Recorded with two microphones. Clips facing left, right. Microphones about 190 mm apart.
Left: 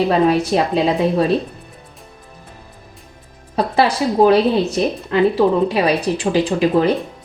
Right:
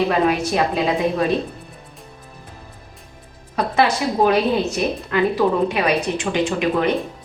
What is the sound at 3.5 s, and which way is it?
A woman's voice, 30° left (ahead or behind).